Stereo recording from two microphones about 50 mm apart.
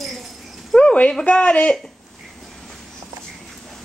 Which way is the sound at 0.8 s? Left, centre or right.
Left.